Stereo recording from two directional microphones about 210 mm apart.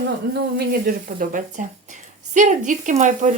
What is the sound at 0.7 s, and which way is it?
Speech, 45° right (ahead or behind).